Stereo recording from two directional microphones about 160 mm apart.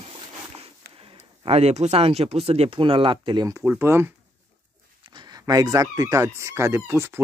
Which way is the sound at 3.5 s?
15° right (ahead or behind).